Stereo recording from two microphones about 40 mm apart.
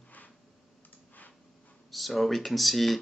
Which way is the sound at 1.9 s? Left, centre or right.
Centre.